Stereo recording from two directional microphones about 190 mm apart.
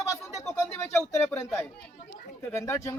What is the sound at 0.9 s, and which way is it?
Speech, 10° left (ahead or behind).